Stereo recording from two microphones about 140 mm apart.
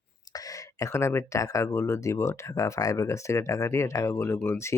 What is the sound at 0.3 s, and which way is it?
Speech, 25° left (ahead or behind).